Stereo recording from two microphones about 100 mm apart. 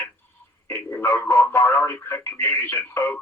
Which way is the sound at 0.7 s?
25° left (ahead or behind).